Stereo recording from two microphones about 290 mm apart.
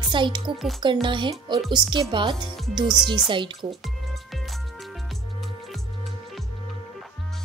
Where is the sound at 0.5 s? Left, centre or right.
Centre.